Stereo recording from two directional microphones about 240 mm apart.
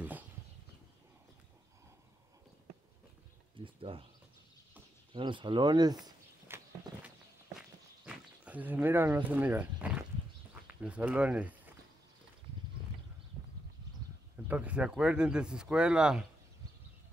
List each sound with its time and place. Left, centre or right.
3.5 s speech: right
5.1 s walk: centre
10.8 s speech: centre
14.3 s speech: centre